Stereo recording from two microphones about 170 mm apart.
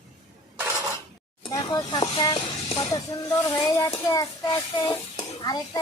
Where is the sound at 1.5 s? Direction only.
25° left (ahead or behind).